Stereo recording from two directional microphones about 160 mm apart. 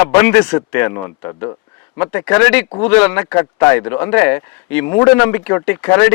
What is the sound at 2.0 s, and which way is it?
Speech, 15° left (ahead or behind).